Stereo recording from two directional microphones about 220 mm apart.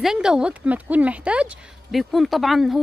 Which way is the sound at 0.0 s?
5° right (ahead or behind).